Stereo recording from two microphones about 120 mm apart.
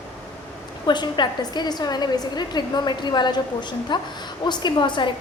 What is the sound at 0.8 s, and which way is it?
A woman's voice, 40° left (ahead or behind).